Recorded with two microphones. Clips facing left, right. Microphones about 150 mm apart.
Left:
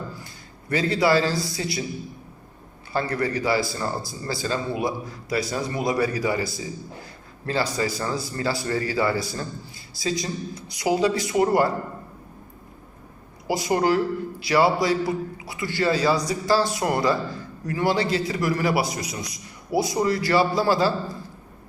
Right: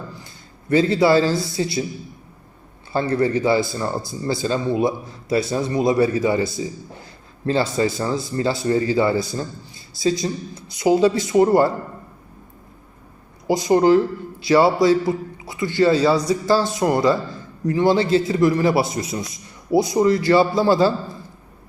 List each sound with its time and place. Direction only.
0.7 s speech: 25° right (ahead or behind)
2.9 s speech: 25° right (ahead or behind)
13.5 s speech: 20° right (ahead or behind)